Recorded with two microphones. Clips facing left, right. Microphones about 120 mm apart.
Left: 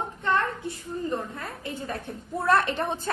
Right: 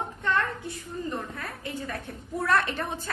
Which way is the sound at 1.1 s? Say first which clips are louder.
Left 3 dB; 20° left (ahead or behind).